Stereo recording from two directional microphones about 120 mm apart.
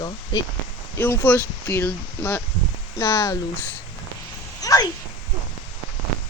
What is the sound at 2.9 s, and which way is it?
Speech, 25° left (ahead or behind).